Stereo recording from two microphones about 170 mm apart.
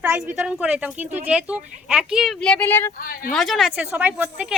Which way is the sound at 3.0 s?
55° left (ahead or behind).